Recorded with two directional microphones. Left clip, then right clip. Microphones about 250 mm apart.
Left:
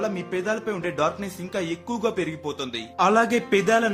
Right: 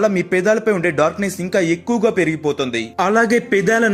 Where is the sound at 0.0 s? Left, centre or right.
Centre.